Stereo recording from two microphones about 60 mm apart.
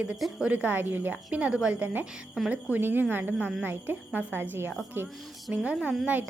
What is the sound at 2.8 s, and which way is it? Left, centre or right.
A woman's voice, right.